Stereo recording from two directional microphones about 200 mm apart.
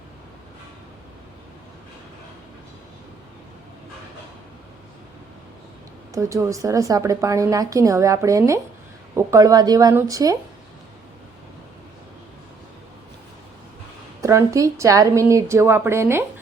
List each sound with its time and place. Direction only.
6.1 s a woman's voice: 15° right (ahead or behind)
14.2 s a woman's voice: 15° right (ahead or behind)